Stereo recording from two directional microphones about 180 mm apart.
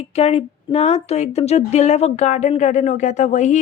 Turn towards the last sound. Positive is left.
turn(degrees=40)  # may be behind; listen again after turning